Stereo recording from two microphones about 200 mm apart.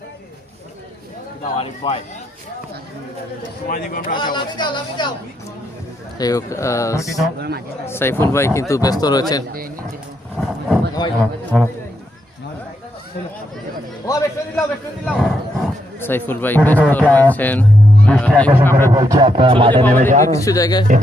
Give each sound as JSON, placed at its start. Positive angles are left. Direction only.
{"t": 1.5, "sound": "speech", "side_deg": 30}
{"t": 3.7, "sound": "speech", "side_deg": 45}
{"t": 4.1, "sound": "speech", "side_deg": 20}
{"t": 6.1, "sound": "speech", "side_deg": 20}
{"t": 7.3, "sound": "a man's voice", "side_deg": -55}
{"t": 7.9, "sound": "speech", "side_deg": 10}
{"t": 10.3, "sound": "speech", "side_deg": 0}
{"t": 11.0, "sound": "speech", "side_deg": 20}
{"t": 11.5, "sound": "speech", "side_deg": 0}
{"t": 14.1, "sound": "a man's voice", "side_deg": 15}
{"t": 15.0, "sound": "speech", "side_deg": 0}
{"t": 18.9, "sound": "speech", "side_deg": -15}
{"t": 20.0, "sound": "a man's voice", "side_deg": -40}
{"t": 20.2, "sound": "speech", "side_deg": 15}